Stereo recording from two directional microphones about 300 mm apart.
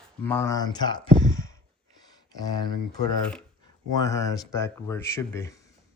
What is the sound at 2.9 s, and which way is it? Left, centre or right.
Speech, centre.